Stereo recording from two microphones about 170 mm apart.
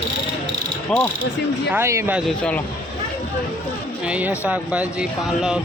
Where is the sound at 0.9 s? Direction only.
5° left (ahead or behind).